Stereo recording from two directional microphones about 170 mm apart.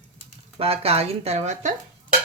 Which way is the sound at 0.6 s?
35° right (ahead or behind).